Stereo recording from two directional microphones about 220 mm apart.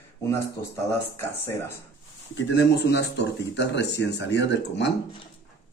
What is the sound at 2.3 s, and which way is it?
Speech, 55° left (ahead or behind).